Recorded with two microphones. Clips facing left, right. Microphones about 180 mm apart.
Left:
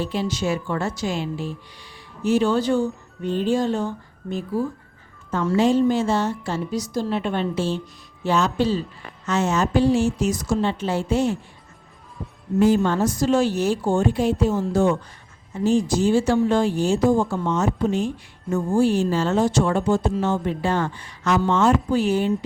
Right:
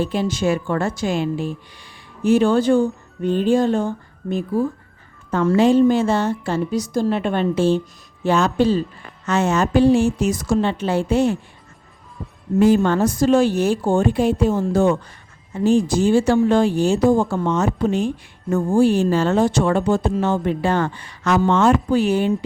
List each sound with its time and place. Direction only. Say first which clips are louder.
0.0 s a woman's voice: right 4 dB; 50° right (ahead or behind)
12.5 s speech: right 3 dB; 60° right (ahead or behind)